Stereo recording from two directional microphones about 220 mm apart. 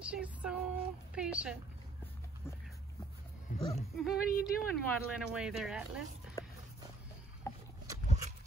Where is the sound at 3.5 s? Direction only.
40° left (ahead or behind).